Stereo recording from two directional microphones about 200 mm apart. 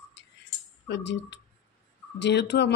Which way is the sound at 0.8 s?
60° left (ahead or behind).